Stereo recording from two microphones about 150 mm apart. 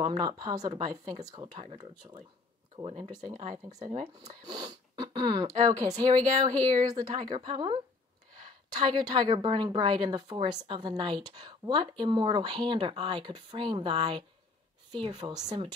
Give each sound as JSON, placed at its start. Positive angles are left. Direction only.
{"t": 0.0, "sound": "a woman's voice", "side_deg": -30}
{"t": 3.3, "sound": "speech", "side_deg": -50}
{"t": 4.3, "sound": "a woman's voice", "side_deg": -30}